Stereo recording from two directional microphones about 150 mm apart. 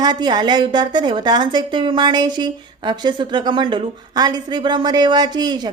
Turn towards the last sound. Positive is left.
turn(degrees=-30)  # may be behind; listen again after turning